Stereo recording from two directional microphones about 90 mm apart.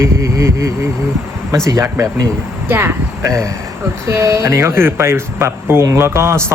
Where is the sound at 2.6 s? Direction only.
25° right (ahead or behind).